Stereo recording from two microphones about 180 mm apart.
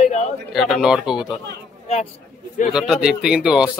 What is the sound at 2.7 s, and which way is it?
Speech, 5° right (ahead or behind).